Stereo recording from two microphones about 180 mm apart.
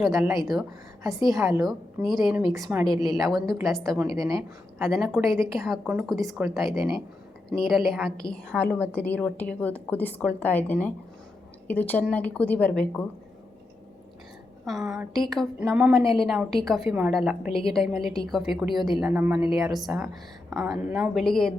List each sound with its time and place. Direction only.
0.0 s a woman's voice: centre (ahead or behind)
4.1 s speech: 20° right (ahead or behind)
4.8 s a woman's voice: centre (ahead or behind)
14.6 s a woman's voice: centre (ahead or behind)